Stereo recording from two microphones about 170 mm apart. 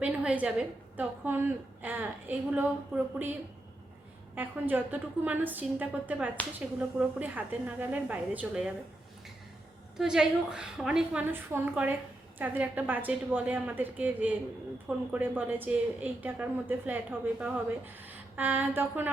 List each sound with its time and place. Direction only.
0.0 s a sound: 10° right (ahead or behind)
0.9 s a woman's voice: 10° right (ahead or behind)
4.4 s a woman's voice: 10° right (ahead or behind)
10.0 s a woman's voice: 5° right (ahead or behind)